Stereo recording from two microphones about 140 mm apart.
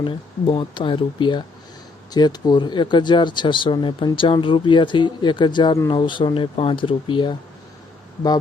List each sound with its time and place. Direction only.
0.0 s speech: 35° left (ahead or behind)